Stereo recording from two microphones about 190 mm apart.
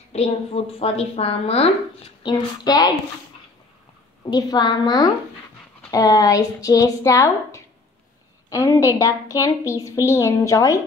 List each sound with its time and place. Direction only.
0.1 s a woman's voice: 35° left (ahead or behind)
2.2 s a woman's voice: 20° left (ahead or behind)
4.2 s a woman's voice: 20° left (ahead or behind)